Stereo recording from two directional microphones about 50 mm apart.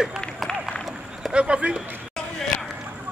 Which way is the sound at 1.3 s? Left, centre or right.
Right.